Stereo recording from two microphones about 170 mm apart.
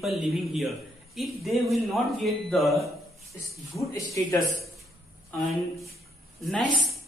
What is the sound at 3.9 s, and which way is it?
Speech, 20° left (ahead or behind).